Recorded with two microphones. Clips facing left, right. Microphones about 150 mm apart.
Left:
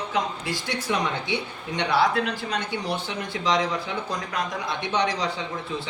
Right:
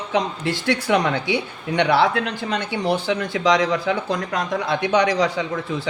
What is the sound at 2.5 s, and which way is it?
Speech, 90° right.